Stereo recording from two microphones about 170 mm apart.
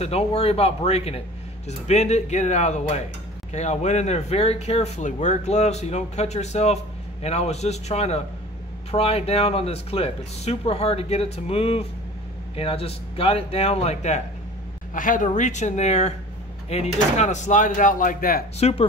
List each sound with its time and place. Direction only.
0.0 s speech: 35° left (ahead or behind)
15.0 s speech: 50° left (ahead or behind)
18.6 s speech: 35° left (ahead or behind)